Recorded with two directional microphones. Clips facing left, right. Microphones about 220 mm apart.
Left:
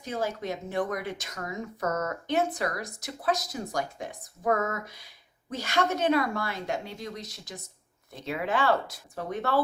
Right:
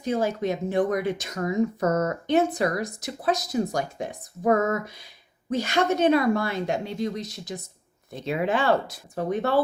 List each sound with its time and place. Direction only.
0.0 s speech: 20° right (ahead or behind)
2.0 s speech: 25° right (ahead or behind)
5.5 s speech: 20° right (ahead or behind)